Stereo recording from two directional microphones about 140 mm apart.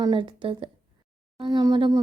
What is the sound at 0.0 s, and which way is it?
A woman's voice, 35° right (ahead or behind).